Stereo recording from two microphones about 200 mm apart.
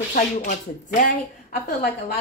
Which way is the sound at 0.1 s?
40° left (ahead or behind).